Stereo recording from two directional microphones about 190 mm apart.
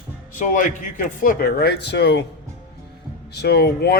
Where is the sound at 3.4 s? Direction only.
60° left (ahead or behind).